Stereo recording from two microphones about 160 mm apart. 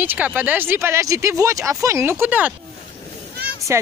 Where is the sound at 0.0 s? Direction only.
10° right (ahead or behind).